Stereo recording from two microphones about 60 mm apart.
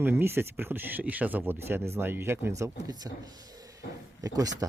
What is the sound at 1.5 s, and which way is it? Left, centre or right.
Speech, right.